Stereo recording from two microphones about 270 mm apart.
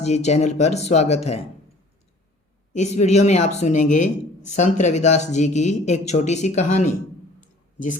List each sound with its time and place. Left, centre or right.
0.0 s speech: left
2.7 s speech: left
7.4 s a sound: left